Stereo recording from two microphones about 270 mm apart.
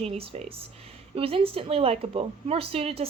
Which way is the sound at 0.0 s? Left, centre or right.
Right.